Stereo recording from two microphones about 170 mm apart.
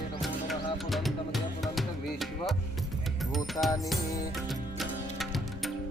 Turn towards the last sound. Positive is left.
turn(degrees=0)  # may be behind; listen again after turning